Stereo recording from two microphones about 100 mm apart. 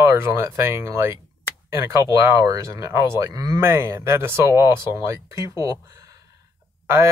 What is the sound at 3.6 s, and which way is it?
Speech, 25° right (ahead or behind).